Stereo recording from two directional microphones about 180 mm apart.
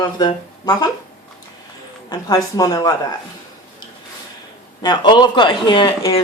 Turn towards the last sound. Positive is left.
turn(degrees=30)  # may be behind; listen again after turning